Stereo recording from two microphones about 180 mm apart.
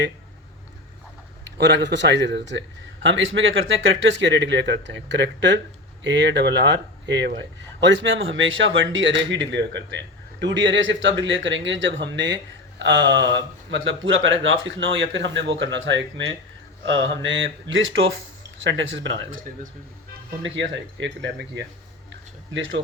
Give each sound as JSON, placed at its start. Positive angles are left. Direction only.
{"t": 1.5, "sound": "a man's voice", "side_deg": -75}
{"t": 10.4, "sound": "speech", "side_deg": -90}
{"t": 20.4, "sound": "a man's voice", "side_deg": -85}
{"t": 22.1, "sound": "a sound", "side_deg": -90}